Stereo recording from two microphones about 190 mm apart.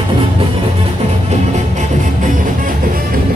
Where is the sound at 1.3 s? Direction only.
35° right (ahead or behind).